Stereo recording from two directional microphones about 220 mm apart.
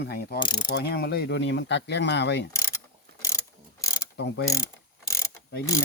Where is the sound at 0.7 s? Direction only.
45° left (ahead or behind).